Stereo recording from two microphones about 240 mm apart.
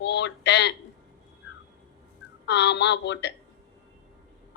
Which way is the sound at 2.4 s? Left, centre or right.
Left.